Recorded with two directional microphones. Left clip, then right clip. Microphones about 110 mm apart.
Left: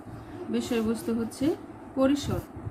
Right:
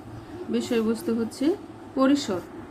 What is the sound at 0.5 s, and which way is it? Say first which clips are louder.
A woman's voice: right 4 dB; 30° right (ahead or behind).